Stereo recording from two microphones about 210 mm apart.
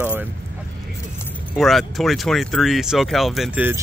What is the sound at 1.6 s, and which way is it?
Speech, centre (ahead or behind).